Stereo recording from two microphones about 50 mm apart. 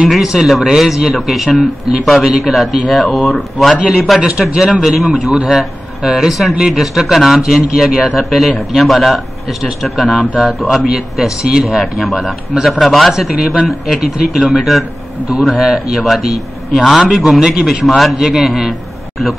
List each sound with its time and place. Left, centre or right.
0.1 s a man's voice: centre
3.8 s speech: centre
4.8 s speech: centre
5.1 s speech: centre
5.5 s a man's voice: centre
13.3 s a man's voice: centre
17.8 s a man's voice: centre